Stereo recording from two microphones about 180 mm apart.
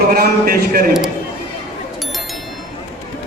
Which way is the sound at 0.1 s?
55° right (ahead or behind).